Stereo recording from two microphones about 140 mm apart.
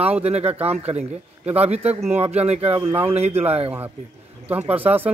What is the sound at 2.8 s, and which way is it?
Speech, 15° right (ahead or behind).